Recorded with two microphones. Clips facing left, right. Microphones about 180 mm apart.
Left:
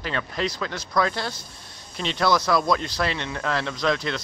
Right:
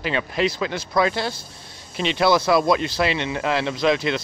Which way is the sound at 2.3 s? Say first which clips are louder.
Right 3 dB; 25° right (ahead or behind).